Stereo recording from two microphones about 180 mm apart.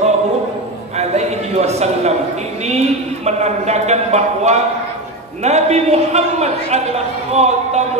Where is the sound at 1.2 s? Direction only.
35° right (ahead or behind).